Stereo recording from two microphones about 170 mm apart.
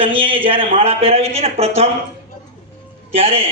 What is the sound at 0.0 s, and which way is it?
A man's voice, 30° right (ahead or behind).